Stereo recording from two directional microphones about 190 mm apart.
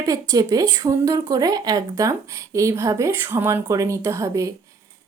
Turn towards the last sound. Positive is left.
turn(degrees=-15)  # may be behind; listen again after turning